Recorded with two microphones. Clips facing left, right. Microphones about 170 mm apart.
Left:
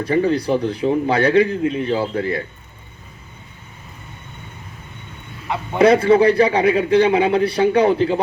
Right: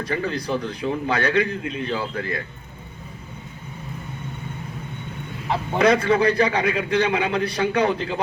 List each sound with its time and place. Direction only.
0.0 s a man's voice: 30° left (ahead or behind)
5.8 s a man's voice: 30° left (ahead or behind)